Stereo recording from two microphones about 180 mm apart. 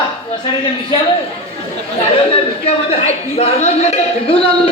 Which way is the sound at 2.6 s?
35° left (ahead or behind).